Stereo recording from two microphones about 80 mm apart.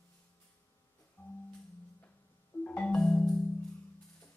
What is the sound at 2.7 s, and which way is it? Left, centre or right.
Music, centre.